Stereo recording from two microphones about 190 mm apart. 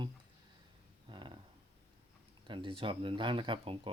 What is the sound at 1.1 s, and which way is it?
Speech, 25° right (ahead or behind).